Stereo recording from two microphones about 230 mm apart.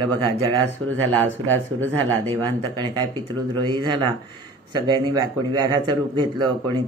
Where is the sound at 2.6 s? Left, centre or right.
Right.